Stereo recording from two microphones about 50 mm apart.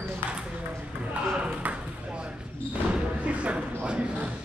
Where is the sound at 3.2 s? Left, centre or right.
Right.